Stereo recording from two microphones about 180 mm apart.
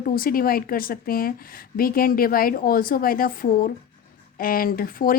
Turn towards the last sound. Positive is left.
turn(degrees=55)  # may be behind; listen again after turning